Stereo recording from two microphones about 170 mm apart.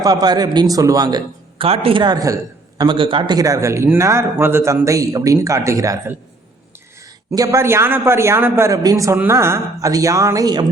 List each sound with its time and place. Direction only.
0.0 s a man's voice: 20° right (ahead or behind)
7.3 s a man's voice: 20° right (ahead or behind)